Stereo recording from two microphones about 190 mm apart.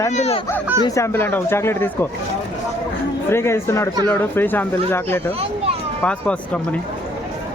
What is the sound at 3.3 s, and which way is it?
Speech, 15° left (ahead or behind).